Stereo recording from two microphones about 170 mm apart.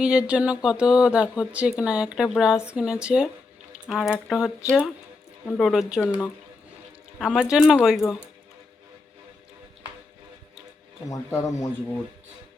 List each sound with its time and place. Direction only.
0.0 s speech: 5° right (ahead or behind)
7.2 s speech: 5° right (ahead or behind)
11.1 s speech: 20° left (ahead or behind)